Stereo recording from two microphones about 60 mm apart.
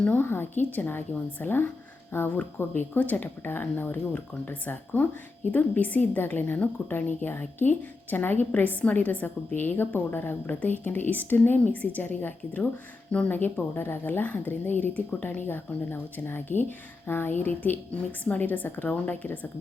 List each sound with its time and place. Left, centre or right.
0.2 s a woman's voice: left
13.3 s a woman's voice: left